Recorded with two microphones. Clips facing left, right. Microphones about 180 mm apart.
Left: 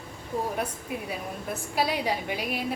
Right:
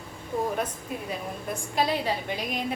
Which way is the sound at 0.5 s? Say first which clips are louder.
Right 1 dB; 10° left (ahead or behind).